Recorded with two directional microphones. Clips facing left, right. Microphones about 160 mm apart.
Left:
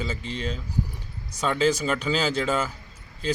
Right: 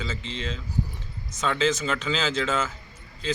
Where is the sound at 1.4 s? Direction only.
10° left (ahead or behind).